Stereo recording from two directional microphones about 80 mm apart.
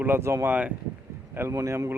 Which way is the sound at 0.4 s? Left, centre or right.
Centre.